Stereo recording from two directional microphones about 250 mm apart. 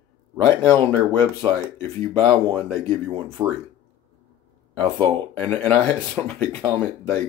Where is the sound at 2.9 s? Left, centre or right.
Right.